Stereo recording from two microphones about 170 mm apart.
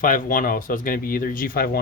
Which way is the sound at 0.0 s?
50° left (ahead or behind).